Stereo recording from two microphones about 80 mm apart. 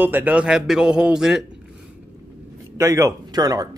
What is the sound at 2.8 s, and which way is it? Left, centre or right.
Speech, right.